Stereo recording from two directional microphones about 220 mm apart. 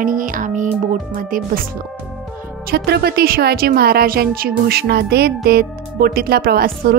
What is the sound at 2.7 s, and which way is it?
A woman's voice, 45° right (ahead or behind).